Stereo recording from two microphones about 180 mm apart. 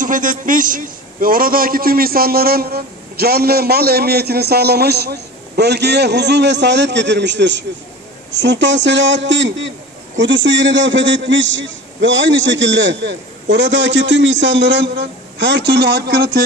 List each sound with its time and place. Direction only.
0.0 s a man's voice: 45° right (ahead or behind); by 16.4 s 65° right (ahead or behind)